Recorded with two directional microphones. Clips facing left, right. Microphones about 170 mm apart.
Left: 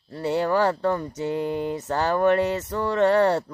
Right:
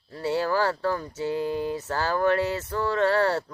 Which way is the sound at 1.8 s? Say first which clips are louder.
Left 4 dB; 20° left (ahead or behind).